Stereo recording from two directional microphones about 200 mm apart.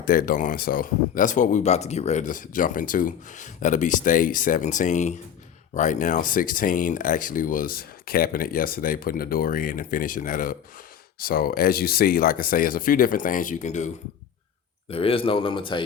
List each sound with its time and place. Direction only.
0.0 s speech: 45° left (ahead or behind); by 15.8 s 25° left (ahead or behind)